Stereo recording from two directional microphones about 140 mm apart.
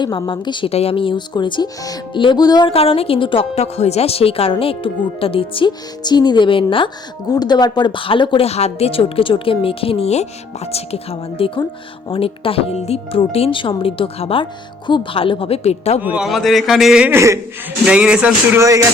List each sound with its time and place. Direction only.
0.0 s speech: 35° left (ahead or behind)
0.7 s speech: 45° left (ahead or behind); by 2.7 s 30° left (ahead or behind)
2.7 s a woman's voice: 45° left (ahead or behind)
16.0 s a man's voice: 10° right (ahead or behind)
17.1 s speech: 20° right (ahead or behind)
17.8 s speech: 5° right (ahead or behind)
18.6 s speech: 20° right (ahead or behind)